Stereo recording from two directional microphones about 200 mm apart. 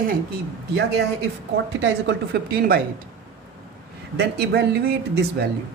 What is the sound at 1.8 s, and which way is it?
Speech, 55° right (ahead or behind).